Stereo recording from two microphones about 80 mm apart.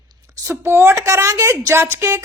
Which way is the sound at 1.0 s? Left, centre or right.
Right.